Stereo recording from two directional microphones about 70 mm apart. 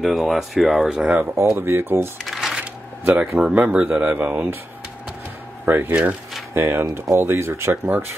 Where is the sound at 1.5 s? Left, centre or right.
Right.